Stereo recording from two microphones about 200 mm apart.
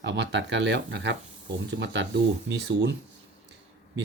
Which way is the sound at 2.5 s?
55° right (ahead or behind).